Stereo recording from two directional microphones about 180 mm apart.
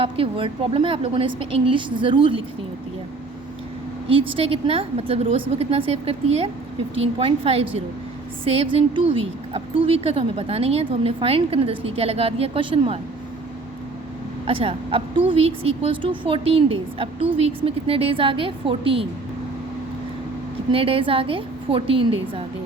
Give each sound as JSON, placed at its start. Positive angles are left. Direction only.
{"t": 0.0, "sound": "a woman's voice", "side_deg": -30}
{"t": 4.1, "sound": "a woman's voice", "side_deg": -30}
{"t": 14.4, "sound": "a woman's voice", "side_deg": -30}
{"t": 20.7, "sound": "a woman's voice", "side_deg": -30}